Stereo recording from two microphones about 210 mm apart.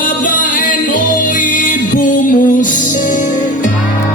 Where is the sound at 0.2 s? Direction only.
40° left (ahead or behind).